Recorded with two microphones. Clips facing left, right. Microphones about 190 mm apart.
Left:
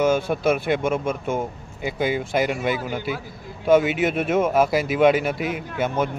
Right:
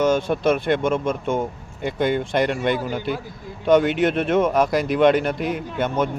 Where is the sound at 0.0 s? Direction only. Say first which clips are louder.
Right 1 dB; 10° left (ahead or behind).